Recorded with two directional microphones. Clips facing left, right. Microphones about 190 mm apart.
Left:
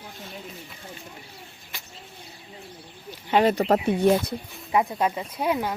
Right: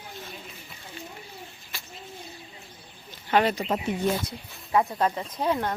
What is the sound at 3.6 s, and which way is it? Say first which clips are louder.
Speech: left 6 dB; 70° left (ahead or behind).